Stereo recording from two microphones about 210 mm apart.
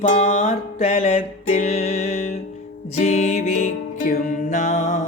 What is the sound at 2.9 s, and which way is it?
Music, 35° left (ahead or behind).